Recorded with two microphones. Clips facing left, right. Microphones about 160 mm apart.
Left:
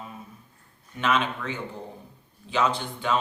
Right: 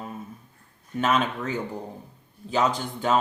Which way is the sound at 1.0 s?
40° right (ahead or behind).